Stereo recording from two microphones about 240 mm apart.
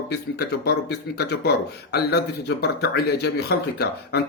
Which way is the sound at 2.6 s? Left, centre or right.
Left.